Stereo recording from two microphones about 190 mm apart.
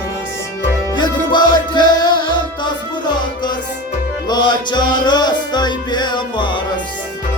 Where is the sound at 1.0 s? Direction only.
25° left (ahead or behind).